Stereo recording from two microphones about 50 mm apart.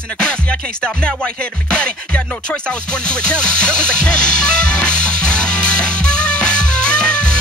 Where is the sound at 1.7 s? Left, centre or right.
Centre.